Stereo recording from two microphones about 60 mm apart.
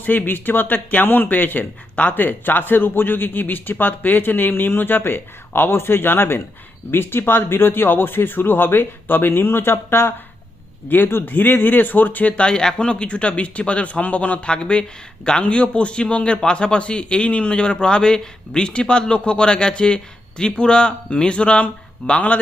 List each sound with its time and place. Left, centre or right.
0.0 s speech: left
10.8 s speech: left
12.4 s speech: centre